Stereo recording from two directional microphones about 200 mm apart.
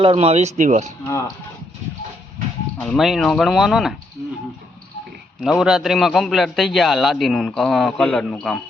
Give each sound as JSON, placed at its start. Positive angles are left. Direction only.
{"t": 0.0, "sound": "speech", "side_deg": -30}
{"t": 1.0, "sound": "speech", "side_deg": 15}
{"t": 2.7, "sound": "a man's voice", "side_deg": 5}
{"t": 5.4, "sound": "a man's voice", "side_deg": 0}